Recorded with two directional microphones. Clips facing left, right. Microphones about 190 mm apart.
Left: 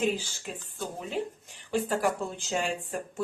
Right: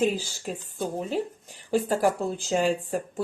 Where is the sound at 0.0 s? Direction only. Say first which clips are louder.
Right 4 dB; 35° right (ahead or behind).